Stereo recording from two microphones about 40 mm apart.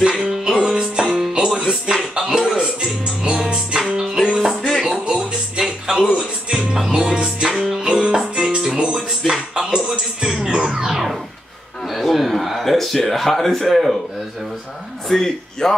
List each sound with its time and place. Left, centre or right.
0.2 s music: centre
2.1 s a sound: centre
2.8 s music: centre
4.6 s a sound: centre
4.8 s music: right
5.1 s music: centre
6.9 s music: centre
8.9 s music: centre
11.9 s a man's voice: centre
15.0 s speech: centre